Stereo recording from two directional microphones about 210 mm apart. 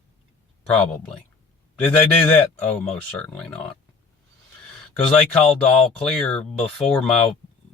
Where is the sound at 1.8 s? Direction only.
5° left (ahead or behind).